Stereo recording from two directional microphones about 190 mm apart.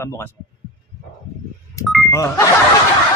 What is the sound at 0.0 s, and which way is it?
Speech, 15° left (ahead or behind).